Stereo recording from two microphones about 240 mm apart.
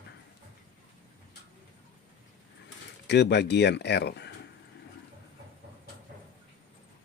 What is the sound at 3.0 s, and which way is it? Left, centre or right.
Speech, left.